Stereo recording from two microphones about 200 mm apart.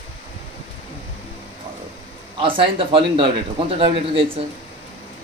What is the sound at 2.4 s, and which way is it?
A man's voice, 25° right (ahead or behind).